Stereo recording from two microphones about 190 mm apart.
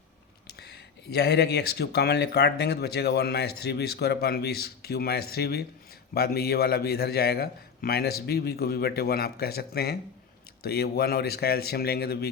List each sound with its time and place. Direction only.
0.6 s speech: 60° left (ahead or behind)